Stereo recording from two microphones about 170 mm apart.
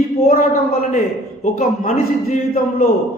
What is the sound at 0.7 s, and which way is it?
Speech, 45° left (ahead or behind).